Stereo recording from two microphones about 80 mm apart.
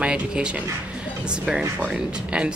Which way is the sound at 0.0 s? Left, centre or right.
Centre.